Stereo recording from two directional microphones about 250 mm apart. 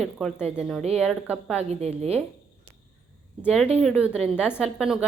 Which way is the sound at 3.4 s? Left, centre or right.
Centre.